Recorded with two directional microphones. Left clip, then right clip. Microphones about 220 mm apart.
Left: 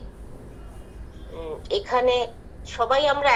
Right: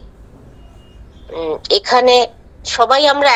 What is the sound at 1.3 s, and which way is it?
A woman's voice, 55° right (ahead or behind).